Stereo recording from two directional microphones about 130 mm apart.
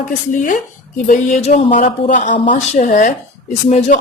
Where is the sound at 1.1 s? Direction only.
70° left (ahead or behind).